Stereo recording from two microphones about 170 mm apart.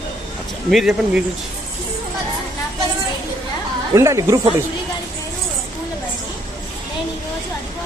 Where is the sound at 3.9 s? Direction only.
15° right (ahead or behind).